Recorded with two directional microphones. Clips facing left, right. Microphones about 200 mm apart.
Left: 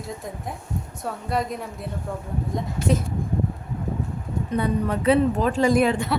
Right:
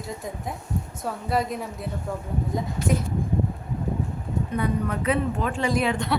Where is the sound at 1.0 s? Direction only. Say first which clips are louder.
Even; centre (ahead or behind).